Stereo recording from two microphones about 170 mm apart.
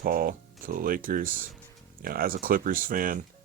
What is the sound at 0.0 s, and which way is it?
Speech, 60° right (ahead or behind).